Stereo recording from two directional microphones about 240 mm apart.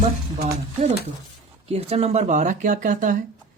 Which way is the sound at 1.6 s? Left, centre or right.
Right.